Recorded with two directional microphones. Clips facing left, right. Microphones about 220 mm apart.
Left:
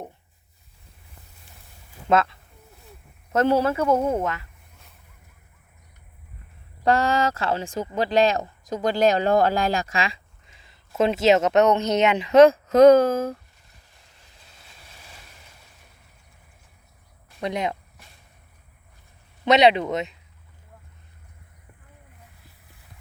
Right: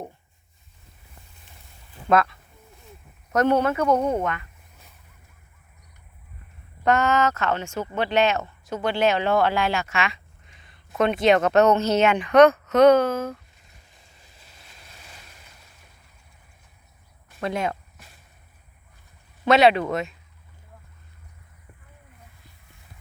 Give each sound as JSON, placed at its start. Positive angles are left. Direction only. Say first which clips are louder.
{"t": 2.0, "sound": "speech", "louder": "even", "side_deg": 25}
{"t": 3.8, "sound": "speech", "louder": "even", "side_deg": 5}
{"t": 6.8, "sound": "speech", "louder": "even", "side_deg": 30}
{"t": 17.4, "sound": "speech", "louder": "even", "side_deg": 20}
{"t": 19.5, "sound": "speech", "louder": "even", "side_deg": 20}